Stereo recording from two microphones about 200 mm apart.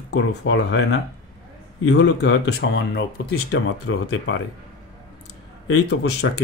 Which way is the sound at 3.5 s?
70° left (ahead or behind).